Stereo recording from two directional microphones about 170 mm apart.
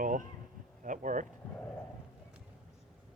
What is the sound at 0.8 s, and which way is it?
Speech, 50° right (ahead or behind).